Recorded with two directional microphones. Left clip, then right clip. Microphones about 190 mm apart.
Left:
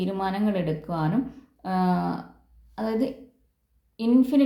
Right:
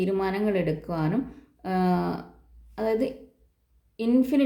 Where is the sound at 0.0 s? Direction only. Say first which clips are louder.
Right 2 dB; 30° right (ahead or behind).